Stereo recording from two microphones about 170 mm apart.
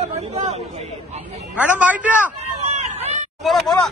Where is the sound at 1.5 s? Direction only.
10° right (ahead or behind).